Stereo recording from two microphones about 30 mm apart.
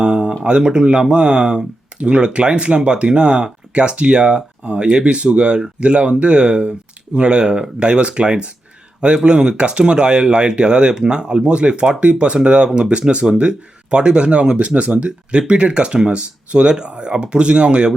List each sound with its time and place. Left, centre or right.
0.0 s a sound: right
0.4 s speech: right
12.9 s speech: right
15.9 s speech: right
16.1 s speech: right